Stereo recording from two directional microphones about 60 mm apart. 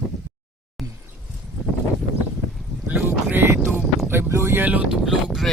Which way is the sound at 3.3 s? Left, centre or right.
Right.